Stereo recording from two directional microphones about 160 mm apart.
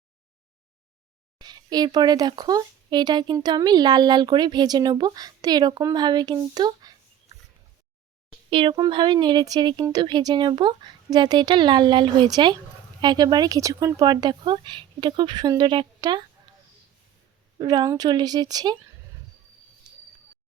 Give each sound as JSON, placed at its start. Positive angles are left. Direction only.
{"t": 1.4, "sound": "speech", "side_deg": -25}
{"t": 8.4, "sound": "speech", "side_deg": -30}
{"t": 17.6, "sound": "speech", "side_deg": -25}